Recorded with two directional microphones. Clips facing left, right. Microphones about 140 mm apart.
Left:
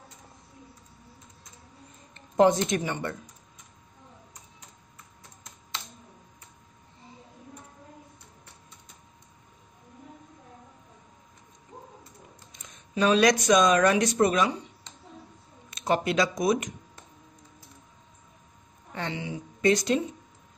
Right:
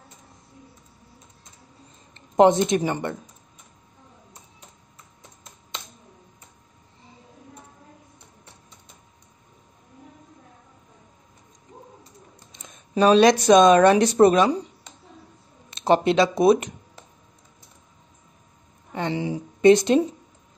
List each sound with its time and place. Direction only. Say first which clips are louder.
2.3 s speech: right 5 dB; 20° right (ahead or behind)
12.9 s speech: right 6 dB; 30° right (ahead or behind)
15.7 s speech: right 7 dB; 30° right (ahead or behind)
19.1 s speech: right 8 dB; 35° right (ahead or behind)